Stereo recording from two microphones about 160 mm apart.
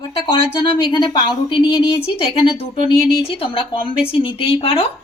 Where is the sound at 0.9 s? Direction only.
30° left (ahead or behind).